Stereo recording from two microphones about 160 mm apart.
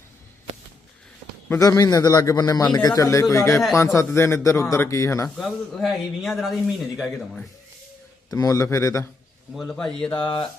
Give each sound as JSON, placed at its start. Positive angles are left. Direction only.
{"t": 1.5, "sound": "a man's voice", "side_deg": 20}
{"t": 5.4, "sound": "a man's voice", "side_deg": 0}
{"t": 8.3, "sound": "a man's voice", "side_deg": 20}
{"t": 9.6, "sound": "a man's voice", "side_deg": 5}
{"t": 10.2, "sound": "a man's voice", "side_deg": 30}